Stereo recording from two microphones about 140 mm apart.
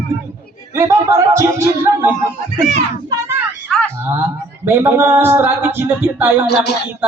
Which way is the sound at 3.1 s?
15° right (ahead or behind).